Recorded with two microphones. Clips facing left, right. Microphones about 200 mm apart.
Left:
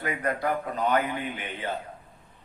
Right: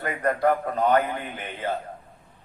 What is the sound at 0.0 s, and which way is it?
A man's voice, 50° right (ahead or behind).